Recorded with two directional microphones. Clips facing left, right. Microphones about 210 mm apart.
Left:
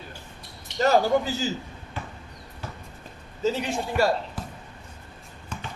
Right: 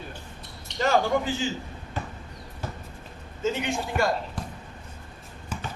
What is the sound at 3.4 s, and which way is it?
Speech, 35° left (ahead or behind).